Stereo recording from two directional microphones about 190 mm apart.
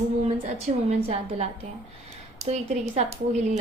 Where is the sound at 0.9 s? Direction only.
35° right (ahead or behind).